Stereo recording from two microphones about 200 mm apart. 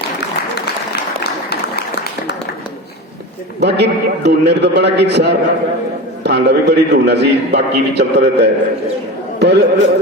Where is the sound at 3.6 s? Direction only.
55° right (ahead or behind).